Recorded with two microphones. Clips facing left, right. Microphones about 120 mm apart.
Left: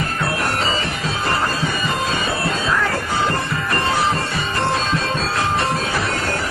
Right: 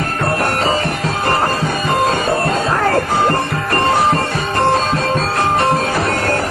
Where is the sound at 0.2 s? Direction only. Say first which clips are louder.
Right 6 dB; 50° right (ahead or behind).